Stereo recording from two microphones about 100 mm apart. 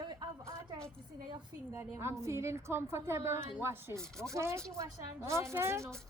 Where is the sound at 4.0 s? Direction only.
5° left (ahead or behind).